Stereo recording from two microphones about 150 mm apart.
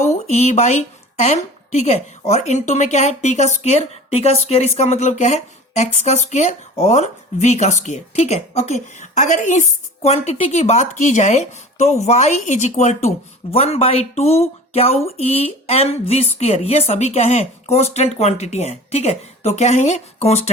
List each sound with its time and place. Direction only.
0.0 s a woman's voice: 45° left (ahead or behind)